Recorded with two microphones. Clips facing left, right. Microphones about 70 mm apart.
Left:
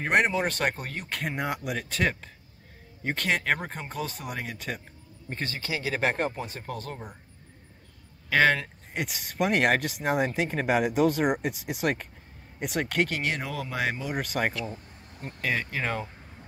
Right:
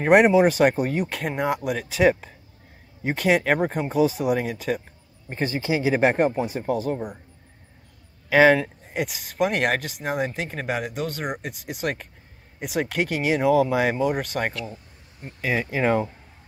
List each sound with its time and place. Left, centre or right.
0.0 s speech: centre
5.3 s speech: centre
8.3 s speech: centre